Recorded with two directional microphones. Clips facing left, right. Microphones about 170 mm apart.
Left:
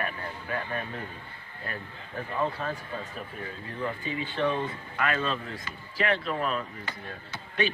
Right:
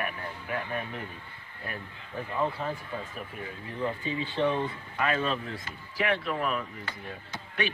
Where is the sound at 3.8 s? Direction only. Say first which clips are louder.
Right 1 dB; 25° right (ahead or behind); by 6.3 s 10° right (ahead or behind).